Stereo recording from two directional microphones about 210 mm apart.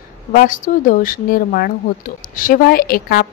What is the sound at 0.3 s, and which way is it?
A woman's voice, 40° left (ahead or behind).